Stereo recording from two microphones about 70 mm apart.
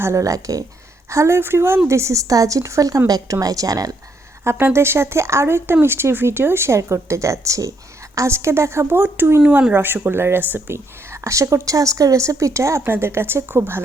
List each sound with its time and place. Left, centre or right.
0.0 s a woman's voice: right
1.1 s a woman's voice: right
4.6 s speech: right
11.1 s a woman's voice: right
12.8 s speech: right